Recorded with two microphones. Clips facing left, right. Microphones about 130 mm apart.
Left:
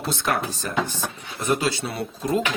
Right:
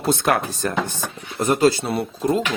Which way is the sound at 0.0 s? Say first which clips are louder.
Right 5 dB; 55° right (ahead or behind).